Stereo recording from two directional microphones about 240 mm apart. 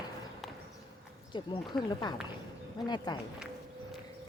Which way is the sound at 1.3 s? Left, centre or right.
Centre.